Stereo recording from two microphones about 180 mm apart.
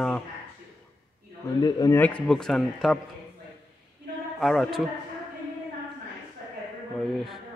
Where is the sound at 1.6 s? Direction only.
20° left (ahead or behind).